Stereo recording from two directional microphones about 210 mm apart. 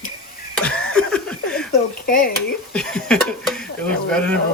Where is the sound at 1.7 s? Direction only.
45° left (ahead or behind).